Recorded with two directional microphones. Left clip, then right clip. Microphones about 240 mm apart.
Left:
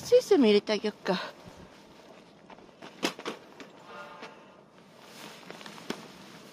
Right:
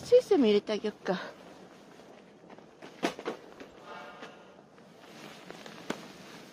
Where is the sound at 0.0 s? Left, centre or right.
Centre.